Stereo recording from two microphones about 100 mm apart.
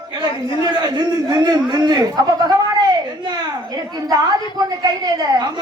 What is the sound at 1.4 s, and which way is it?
Speech, 45° right (ahead or behind).